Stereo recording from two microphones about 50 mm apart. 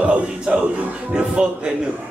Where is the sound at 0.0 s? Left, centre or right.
Right.